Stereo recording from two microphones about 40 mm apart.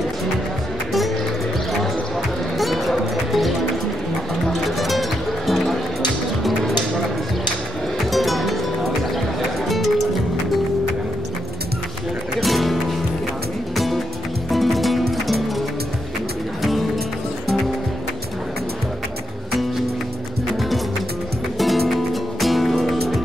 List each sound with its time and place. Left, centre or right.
2.6 s music: centre
8.1 s music: centre
12.4 s music: centre
21.5 s music: centre